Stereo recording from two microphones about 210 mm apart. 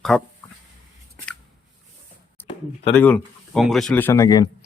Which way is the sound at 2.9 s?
5° left (ahead or behind).